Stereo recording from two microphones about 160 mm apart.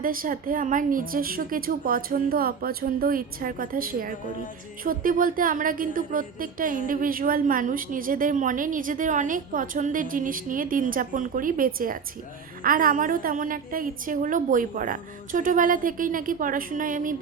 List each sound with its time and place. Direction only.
0.0 s a woman's voice: 60° right (ahead or behind)